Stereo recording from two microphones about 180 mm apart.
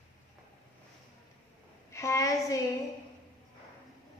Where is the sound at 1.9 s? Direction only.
15° left (ahead or behind).